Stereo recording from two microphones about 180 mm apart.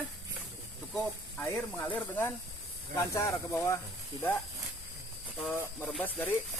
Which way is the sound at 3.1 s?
15° left (ahead or behind).